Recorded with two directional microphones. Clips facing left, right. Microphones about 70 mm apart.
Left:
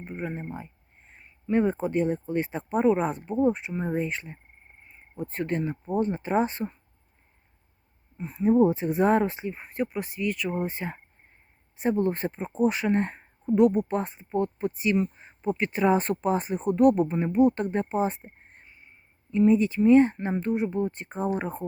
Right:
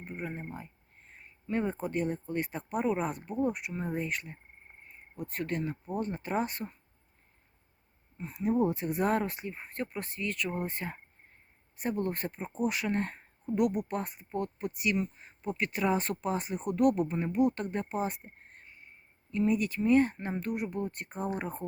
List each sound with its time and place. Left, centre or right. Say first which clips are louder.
0.0 s a sound: left 5 dB; left
0.3 s speech: left 5 dB; centre
1.5 s speech: left 8 dB; left
8.2 s speech: left 8 dB; left